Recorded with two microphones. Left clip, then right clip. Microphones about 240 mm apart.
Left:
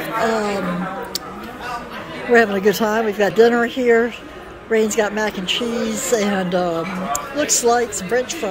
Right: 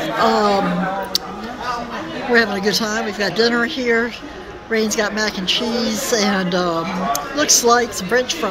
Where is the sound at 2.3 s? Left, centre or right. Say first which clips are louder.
Left 2 dB; centre.